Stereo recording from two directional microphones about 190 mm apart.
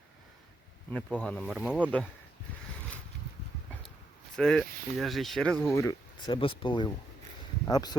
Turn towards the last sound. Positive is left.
turn(degrees=20)  # may be behind; listen again after turning